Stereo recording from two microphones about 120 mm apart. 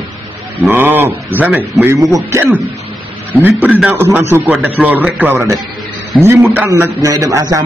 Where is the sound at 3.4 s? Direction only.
15° right (ahead or behind).